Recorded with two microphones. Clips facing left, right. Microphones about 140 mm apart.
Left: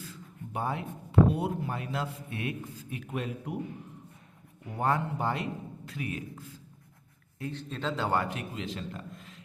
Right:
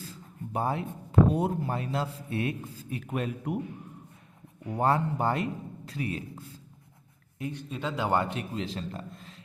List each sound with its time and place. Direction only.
0.5 s a man's voice: 35° right (ahead or behind)
3.1 s a man's voice: 50° right (ahead or behind)
4.8 s a man's voice: 35° right (ahead or behind)
7.3 s a man's voice: 15° right (ahead or behind)
8.1 s a man's voice: 25° right (ahead or behind)